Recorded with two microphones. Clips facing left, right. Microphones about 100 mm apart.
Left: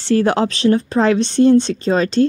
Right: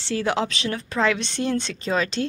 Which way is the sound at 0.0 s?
50° left (ahead or behind).